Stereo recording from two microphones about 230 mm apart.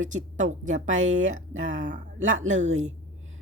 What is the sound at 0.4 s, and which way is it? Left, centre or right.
Speech, right.